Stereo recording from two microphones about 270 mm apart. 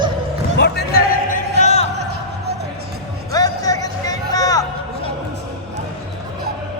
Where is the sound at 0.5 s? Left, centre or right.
Left.